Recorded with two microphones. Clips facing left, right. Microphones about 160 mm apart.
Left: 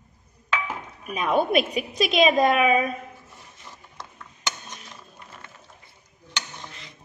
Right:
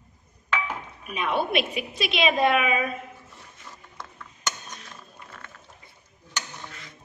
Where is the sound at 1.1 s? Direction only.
40° left (ahead or behind).